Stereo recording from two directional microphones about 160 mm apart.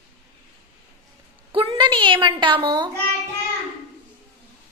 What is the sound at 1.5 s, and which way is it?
A woman's voice, 30° right (ahead or behind).